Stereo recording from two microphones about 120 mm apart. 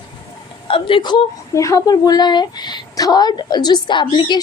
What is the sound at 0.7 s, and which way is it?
Speech, 45° left (ahead or behind).